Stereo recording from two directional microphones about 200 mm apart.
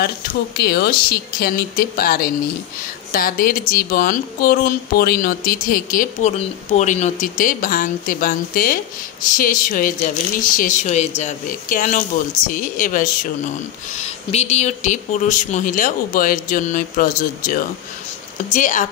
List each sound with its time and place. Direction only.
0.0 s speech: 50° left (ahead or behind)